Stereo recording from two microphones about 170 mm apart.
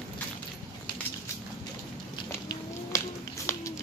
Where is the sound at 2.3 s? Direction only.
20° left (ahead or behind).